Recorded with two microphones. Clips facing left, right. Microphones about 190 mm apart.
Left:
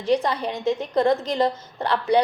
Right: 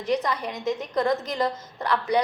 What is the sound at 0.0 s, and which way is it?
A woman's voice, 30° left (ahead or behind).